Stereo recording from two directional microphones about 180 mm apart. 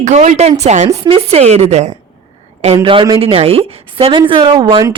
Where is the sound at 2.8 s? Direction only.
25° right (ahead or behind).